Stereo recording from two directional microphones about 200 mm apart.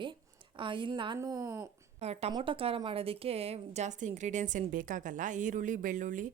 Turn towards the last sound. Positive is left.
turn(degrees=-40)  # may be behind; listen again after turning